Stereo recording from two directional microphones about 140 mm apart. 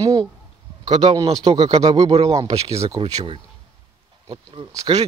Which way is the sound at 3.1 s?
40° right (ahead or behind).